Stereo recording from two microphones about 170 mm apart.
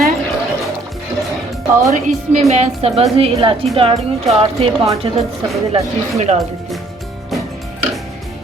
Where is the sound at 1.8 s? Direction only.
45° right (ahead or behind).